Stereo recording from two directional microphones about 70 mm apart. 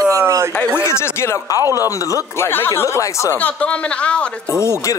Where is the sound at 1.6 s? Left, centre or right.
Right.